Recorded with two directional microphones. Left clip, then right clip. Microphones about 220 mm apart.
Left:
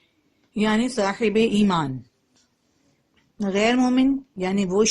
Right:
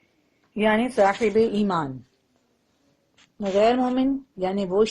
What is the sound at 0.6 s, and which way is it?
Speech, 45° left (ahead or behind).